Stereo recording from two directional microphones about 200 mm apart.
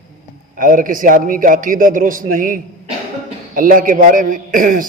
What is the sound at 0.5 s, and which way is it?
A man's voice, 40° right (ahead or behind).